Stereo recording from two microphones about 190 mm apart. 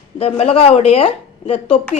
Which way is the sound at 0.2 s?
30° left (ahead or behind).